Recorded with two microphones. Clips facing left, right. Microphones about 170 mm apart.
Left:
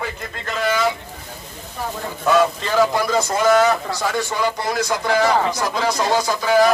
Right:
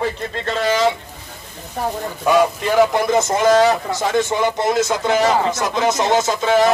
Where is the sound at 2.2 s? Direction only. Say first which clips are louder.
Right 1 dB; 15° right (ahead or behind).